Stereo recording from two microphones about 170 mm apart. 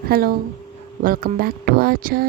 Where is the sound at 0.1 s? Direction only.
60° right (ahead or behind).